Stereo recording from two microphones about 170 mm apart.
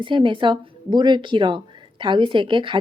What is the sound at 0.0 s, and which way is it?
Speech, 30° right (ahead or behind).